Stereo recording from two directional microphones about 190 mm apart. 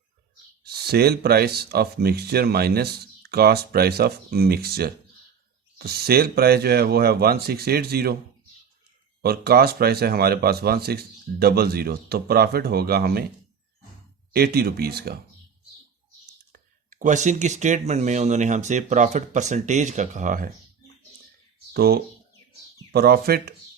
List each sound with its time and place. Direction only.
0.6 s speech: 55° right (ahead or behind)
9.2 s speech: 55° right (ahead or behind)
14.3 s speech: 55° right (ahead or behind)
16.5 s speech: 45° right (ahead or behind)
21.7 s speech: 55° right (ahead or behind)